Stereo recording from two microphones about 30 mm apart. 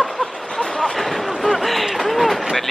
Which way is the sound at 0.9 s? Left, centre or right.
Centre.